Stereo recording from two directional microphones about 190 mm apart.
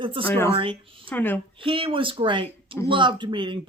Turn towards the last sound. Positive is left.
turn(degrees=-25)  # may be behind; listen again after turning